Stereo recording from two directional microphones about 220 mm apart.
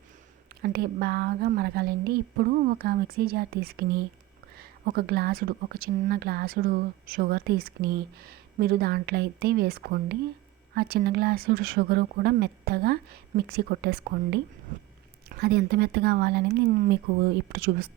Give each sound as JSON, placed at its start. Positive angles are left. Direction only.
{"t": 0.6, "sound": "speech", "side_deg": -45}